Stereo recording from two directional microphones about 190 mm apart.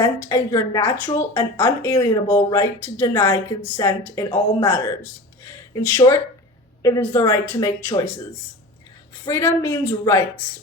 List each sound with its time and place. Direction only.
0.0 s a woman's voice: 15° left (ahead or behind)
5.4 s a sound: 15° left (ahead or behind)
6.8 s a woman's voice: 20° left (ahead or behind)
9.2 s a woman's voice: 15° left (ahead or behind)